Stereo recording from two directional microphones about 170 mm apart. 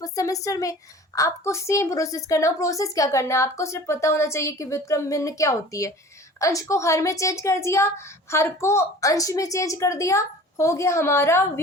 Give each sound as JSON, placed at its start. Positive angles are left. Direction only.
{"t": 0.0, "sound": "a woman's voice", "side_deg": 20}